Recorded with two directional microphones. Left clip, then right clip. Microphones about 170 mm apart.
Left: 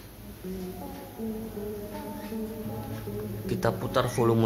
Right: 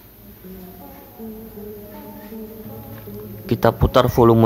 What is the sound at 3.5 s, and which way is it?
Speech, 55° right (ahead or behind).